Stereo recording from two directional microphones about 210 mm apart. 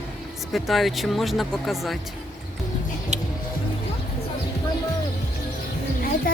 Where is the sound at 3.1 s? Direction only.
35° right (ahead or behind).